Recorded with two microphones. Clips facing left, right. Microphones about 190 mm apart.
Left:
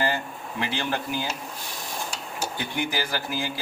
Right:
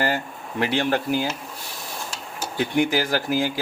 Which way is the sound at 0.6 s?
50° right (ahead or behind).